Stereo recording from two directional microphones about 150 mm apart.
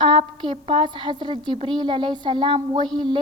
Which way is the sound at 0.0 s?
35° right (ahead or behind).